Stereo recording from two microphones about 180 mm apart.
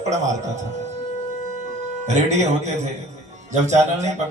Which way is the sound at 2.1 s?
40° right (ahead or behind).